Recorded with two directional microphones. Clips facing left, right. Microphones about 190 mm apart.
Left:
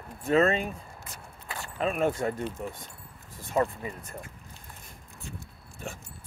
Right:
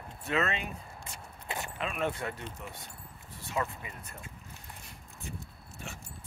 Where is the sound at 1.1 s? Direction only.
20° right (ahead or behind).